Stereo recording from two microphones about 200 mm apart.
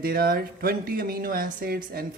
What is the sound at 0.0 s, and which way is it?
Speech, 50° right (ahead or behind).